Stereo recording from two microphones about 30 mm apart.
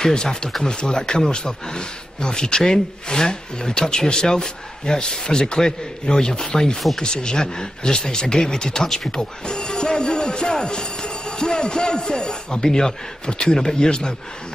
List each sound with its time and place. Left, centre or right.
0.0 s speech: left
8.8 s speech: centre
9.5 s speech: left